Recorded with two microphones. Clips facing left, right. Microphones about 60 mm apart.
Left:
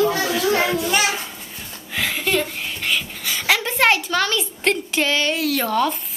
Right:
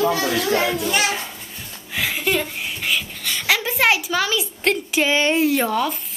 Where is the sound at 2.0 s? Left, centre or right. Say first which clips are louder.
Even; centre.